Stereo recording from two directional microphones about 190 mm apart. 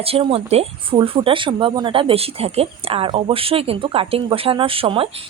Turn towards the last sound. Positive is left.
turn(degrees=-30)  # may be behind; listen again after turning